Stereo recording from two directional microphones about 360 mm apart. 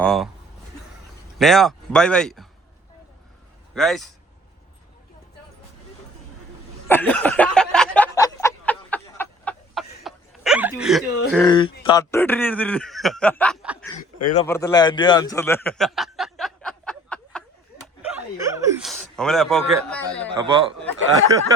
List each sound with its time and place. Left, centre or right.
0.0 s a sound: centre
1.4 s speech: centre
3.8 s speech: centre
6.8 s a sound: centre
11.4 s speech: centre
14.0 s speech: left
14.4 s chuckle: centre
18.1 s speech: centre
21.2 s a sound: centre